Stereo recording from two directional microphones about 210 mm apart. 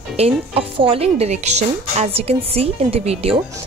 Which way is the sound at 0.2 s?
25° right (ahead or behind).